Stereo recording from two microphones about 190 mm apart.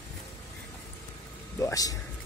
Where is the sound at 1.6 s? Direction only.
20° left (ahead or behind).